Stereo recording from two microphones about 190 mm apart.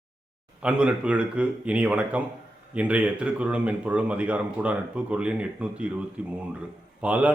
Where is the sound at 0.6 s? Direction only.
5° right (ahead or behind).